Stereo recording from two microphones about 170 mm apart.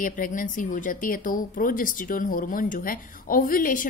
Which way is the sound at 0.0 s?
50° left (ahead or behind).